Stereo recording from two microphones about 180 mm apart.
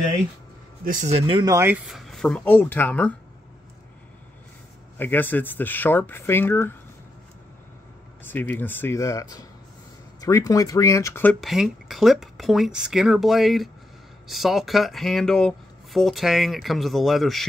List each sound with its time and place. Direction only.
0.8 s speech: 45° right (ahead or behind)
1.1 s speech: 30° right (ahead or behind)
1.9 s speech: centre (ahead or behind)
4.9 s speech: 10° left (ahead or behind)
8.2 s speech: 10° left (ahead or behind)
11.4 s speech: centre (ahead or behind)